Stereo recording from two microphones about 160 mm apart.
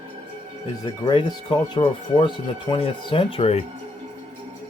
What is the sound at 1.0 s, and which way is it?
Speech, 30° left (ahead or behind).